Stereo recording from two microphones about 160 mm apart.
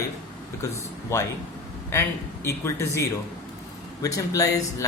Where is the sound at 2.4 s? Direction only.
20° left (ahead or behind).